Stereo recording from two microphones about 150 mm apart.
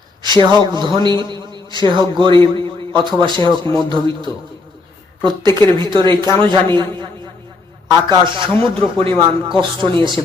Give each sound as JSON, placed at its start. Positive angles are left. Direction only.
{"t": 0.2, "sound": "a man's voice", "side_deg": -30}
{"t": 2.6, "sound": "a sound", "side_deg": -35}
{"t": 3.2, "sound": "a man's voice", "side_deg": -30}